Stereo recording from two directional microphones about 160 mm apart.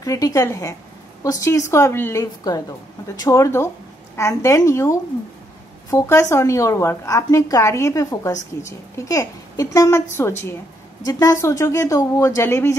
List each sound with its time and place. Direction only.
0.0 s a woman's voice: 20° left (ahead or behind)